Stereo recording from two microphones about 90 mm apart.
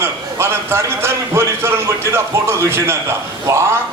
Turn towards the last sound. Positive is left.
turn(degrees=-30)  # may be behind; listen again after turning